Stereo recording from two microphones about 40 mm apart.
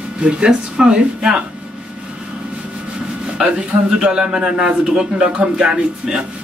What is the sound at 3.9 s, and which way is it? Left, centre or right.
Speech, right.